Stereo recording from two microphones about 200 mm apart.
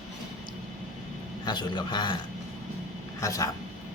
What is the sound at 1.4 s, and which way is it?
Speech, 20° left (ahead or behind).